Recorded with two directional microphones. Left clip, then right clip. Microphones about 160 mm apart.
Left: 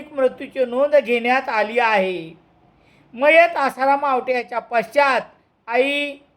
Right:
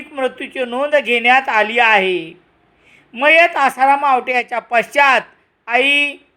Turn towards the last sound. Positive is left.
turn(degrees=-30)  # may be behind; listen again after turning